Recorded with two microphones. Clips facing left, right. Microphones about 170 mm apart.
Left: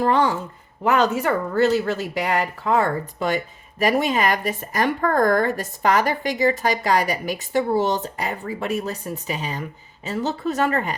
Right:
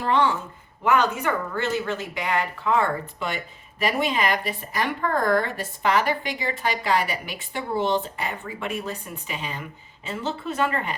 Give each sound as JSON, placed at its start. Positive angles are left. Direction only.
{"t": 0.0, "sound": "speech", "side_deg": 40}